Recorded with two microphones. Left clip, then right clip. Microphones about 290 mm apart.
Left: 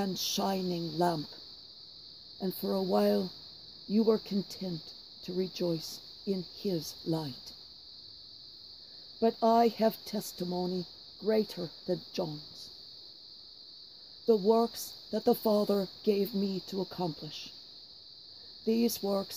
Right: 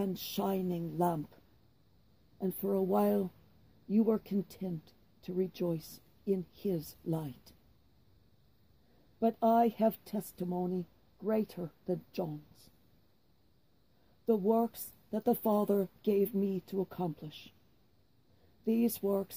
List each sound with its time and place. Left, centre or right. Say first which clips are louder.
0.0 s speech: left 4 dB; left
2.4 s speech: even; left
9.2 s speech: left 3 dB; centre
14.2 s speech: left 4 dB; left
18.6 s speech: left 2 dB; centre